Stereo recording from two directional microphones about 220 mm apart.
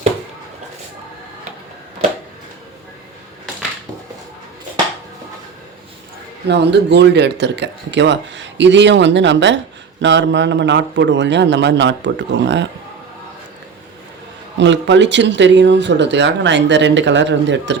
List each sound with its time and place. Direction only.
6.5 s speech: 50° right (ahead or behind)
14.6 s speech: 55° right (ahead or behind)